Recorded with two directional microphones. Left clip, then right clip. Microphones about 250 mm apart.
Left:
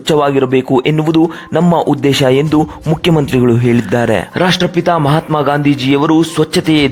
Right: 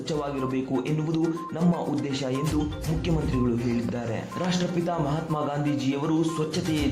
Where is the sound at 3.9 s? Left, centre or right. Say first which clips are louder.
Left 19 dB; left.